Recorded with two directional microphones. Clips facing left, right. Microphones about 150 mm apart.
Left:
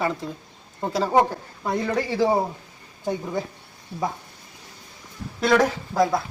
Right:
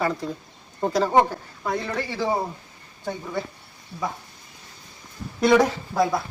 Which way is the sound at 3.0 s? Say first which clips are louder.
Left 3 dB; 15° left (ahead or behind).